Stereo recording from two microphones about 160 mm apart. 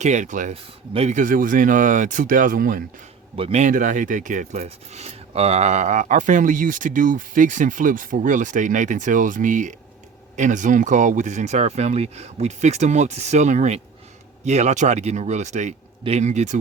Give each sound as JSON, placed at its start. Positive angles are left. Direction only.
{"t": 0.0, "sound": "speech", "side_deg": -45}
{"t": 0.5, "sound": "speech", "side_deg": -40}
{"t": 3.3, "sound": "speech", "side_deg": -40}